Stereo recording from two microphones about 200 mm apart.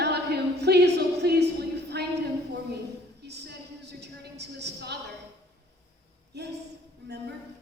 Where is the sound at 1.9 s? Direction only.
55° right (ahead or behind).